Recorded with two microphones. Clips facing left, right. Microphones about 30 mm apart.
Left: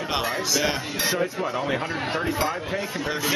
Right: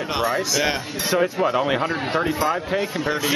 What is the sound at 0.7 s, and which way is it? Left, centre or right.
Speech, right.